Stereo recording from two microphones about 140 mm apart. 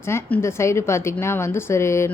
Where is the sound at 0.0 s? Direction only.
20° left (ahead or behind).